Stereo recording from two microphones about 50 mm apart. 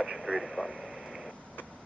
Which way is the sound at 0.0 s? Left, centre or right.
Centre.